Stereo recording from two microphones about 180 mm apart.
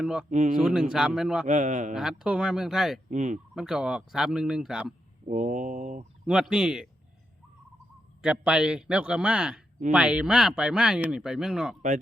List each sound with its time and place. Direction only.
0.0 s speech: 5° right (ahead or behind)
0.3 s speech: 40° right (ahead or behind)
0.6 s speech: 5° right (ahead or behind)
1.5 s a man's voice: 40° right (ahead or behind)
1.9 s speech: 5° right (ahead or behind)
3.1 s a man's voice: 40° right (ahead or behind)
3.5 s speech: 5° right (ahead or behind)
5.3 s speech: 45° right (ahead or behind)
6.2 s speech: 5° right (ahead or behind)
8.2 s speech: 5° right (ahead or behind)